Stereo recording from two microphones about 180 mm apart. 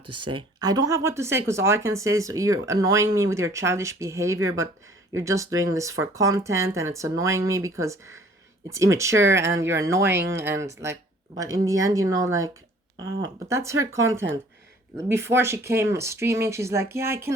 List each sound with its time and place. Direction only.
0.3 s speech: 25° right (ahead or behind)